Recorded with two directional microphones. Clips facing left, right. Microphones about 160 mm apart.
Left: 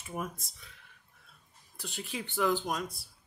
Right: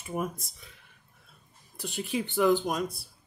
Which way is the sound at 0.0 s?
10° right (ahead or behind).